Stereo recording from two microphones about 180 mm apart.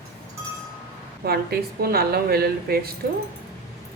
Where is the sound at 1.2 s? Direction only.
60° right (ahead or behind).